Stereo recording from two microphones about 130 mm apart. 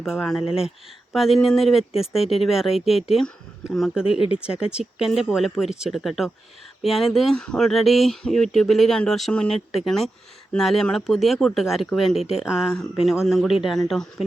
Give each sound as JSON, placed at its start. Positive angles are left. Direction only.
{"t": 0.0, "sound": "speech", "side_deg": 0}